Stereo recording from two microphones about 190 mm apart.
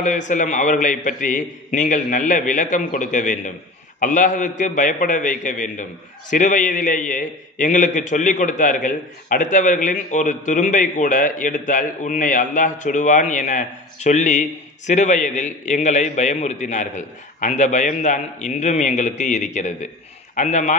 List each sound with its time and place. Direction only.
0.0 s a man's voice: 40° left (ahead or behind)